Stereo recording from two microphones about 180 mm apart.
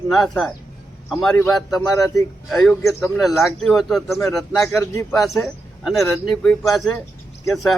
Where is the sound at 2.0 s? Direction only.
20° left (ahead or behind).